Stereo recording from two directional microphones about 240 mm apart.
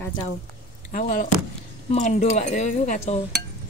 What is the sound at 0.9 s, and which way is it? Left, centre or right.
A man's voice, left.